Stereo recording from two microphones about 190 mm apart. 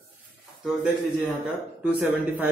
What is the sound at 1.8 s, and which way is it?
Speech, 10° right (ahead or behind).